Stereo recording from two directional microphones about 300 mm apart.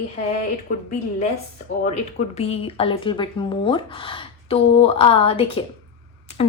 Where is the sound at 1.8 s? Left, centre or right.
Left.